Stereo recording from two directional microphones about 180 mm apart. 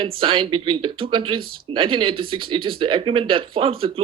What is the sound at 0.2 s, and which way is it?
Speech, 30° right (ahead or behind).